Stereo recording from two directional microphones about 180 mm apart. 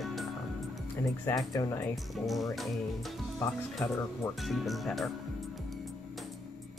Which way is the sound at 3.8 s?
10° left (ahead or behind).